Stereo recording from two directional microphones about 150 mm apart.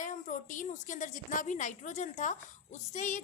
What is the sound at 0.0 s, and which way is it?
A woman's voice, 55° left (ahead or behind).